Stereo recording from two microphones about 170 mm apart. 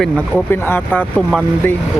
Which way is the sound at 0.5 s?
10° left (ahead or behind).